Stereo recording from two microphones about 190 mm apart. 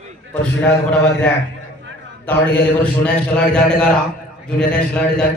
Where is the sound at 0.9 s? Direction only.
5° left (ahead or behind).